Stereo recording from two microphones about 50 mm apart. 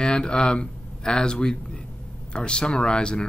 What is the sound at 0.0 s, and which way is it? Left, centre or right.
Speech, centre.